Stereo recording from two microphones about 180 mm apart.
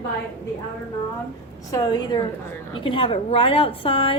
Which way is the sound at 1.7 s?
20° left (ahead or behind).